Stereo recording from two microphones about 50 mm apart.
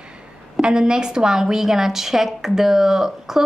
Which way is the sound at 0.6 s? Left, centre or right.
Centre.